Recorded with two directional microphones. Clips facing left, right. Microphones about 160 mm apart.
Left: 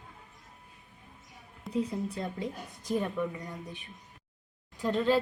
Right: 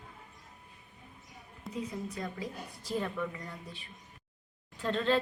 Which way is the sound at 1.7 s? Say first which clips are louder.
Left 6 dB; 30° left (ahead or behind).